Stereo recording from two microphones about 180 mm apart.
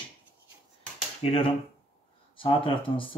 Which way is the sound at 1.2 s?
35° left (ahead or behind).